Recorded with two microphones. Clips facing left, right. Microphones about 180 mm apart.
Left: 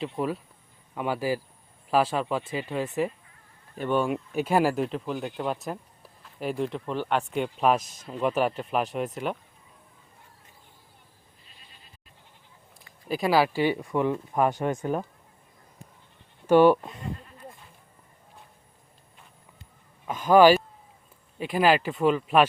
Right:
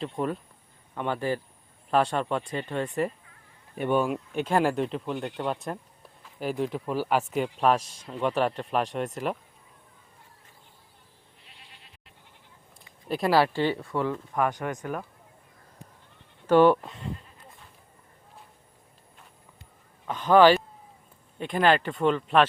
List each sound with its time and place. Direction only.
0.0 s speech: 5° left (ahead or behind)
3.8 s speech: 15° right (ahead or behind)
4.0 s speech: centre (ahead or behind)
7.8 s speech: 30° right (ahead or behind)
8.0 s speech: 5° left (ahead or behind)
11.4 s sheep: 75° right (ahead or behind)
12.8 s speech: centre (ahead or behind); by 15.0 s 25° left (ahead or behind)
16.5 s speech: 10° left (ahead or behind)
20.1 s speech: 10° left (ahead or behind)